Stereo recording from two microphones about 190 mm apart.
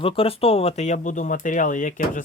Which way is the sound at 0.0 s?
30° left (ahead or behind).